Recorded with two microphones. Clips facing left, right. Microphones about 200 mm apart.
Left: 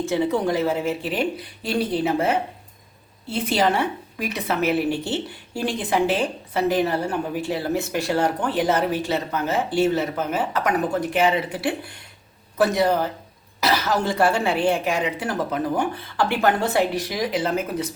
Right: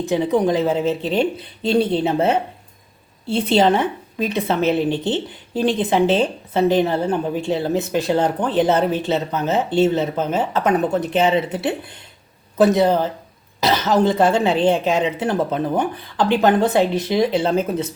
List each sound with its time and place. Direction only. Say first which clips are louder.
0.0 s a woman's voice: right 4 dB; 15° right (ahead or behind)